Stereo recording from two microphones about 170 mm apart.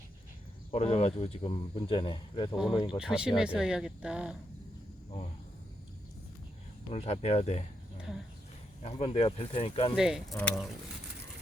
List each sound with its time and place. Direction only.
0.7 s speech: 40° left (ahead or behind)
3.0 s speech: 5° right (ahead or behind)
6.9 s speech: 35° left (ahead or behind)
8.8 s speech: 35° left (ahead or behind)
9.9 s speech: 5° right (ahead or behind)